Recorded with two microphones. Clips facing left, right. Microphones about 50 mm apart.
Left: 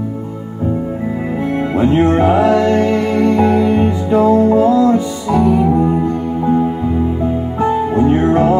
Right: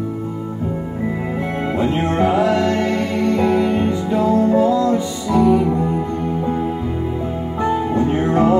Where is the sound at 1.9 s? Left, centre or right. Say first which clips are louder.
Left 6 dB; centre; by 4.5 s left.